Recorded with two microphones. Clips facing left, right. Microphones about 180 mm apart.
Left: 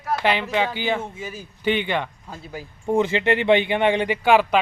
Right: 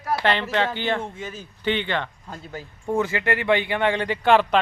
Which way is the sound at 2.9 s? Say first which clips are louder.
Left 4 dB; 25° left (ahead or behind).